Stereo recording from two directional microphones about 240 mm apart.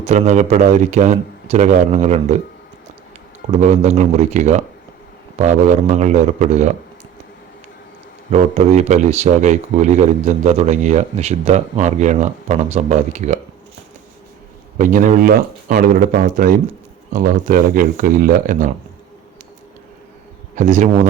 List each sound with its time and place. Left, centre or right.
0.0 s speech: right
3.6 s speech: right
8.3 s speech: right
14.8 s speech: right
20.6 s speech: right